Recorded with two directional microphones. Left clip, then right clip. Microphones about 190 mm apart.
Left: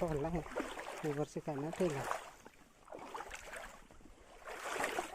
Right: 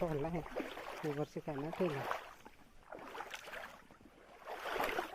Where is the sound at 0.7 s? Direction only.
20° left (ahead or behind).